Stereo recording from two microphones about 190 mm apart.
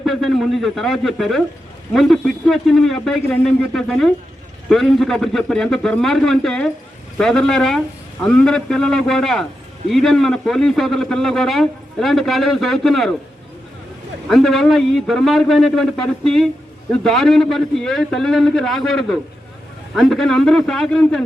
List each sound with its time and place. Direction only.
0.0 s a man's voice: centre (ahead or behind)
14.3 s a man's voice: centre (ahead or behind)